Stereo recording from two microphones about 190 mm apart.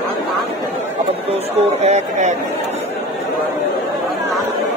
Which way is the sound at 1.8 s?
35° right (ahead or behind).